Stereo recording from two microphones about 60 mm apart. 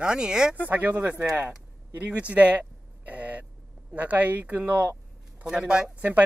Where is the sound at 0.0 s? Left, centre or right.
Centre.